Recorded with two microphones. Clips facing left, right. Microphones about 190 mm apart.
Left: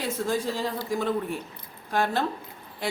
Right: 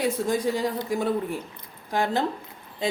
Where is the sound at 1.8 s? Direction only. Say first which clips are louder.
Right 1 dB; 15° right (ahead or behind).